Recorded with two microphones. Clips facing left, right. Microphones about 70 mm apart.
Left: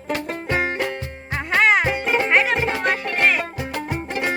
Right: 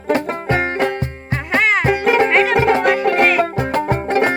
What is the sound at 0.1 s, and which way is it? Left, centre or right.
Music, right.